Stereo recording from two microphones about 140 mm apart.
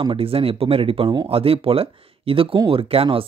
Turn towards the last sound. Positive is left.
turn(degrees=-40)  # may be behind; listen again after turning